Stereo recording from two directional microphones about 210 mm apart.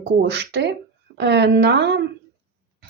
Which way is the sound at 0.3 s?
50° right (ahead or behind).